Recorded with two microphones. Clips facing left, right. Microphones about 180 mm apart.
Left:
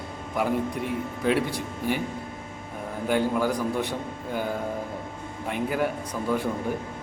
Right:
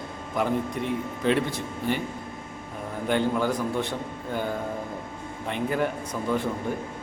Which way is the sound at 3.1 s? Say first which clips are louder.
Even; 10° left (ahead or behind).